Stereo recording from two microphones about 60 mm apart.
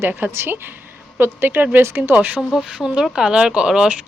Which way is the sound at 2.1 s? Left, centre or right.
Right.